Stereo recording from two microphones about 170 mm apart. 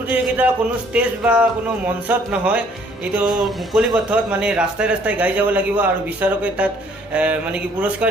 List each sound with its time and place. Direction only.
0.1 s speech: 10° right (ahead or behind)